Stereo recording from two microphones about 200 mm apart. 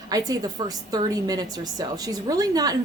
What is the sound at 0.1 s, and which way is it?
A woman's voice, 20° right (ahead or behind).